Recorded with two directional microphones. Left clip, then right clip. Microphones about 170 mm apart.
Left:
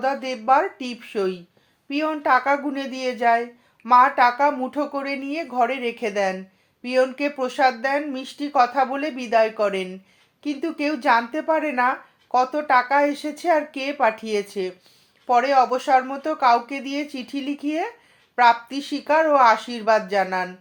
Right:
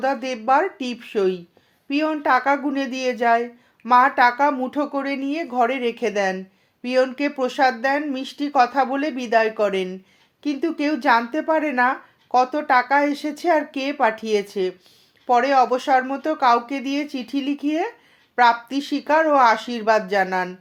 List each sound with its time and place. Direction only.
0.0 s speech: 30° right (ahead or behind)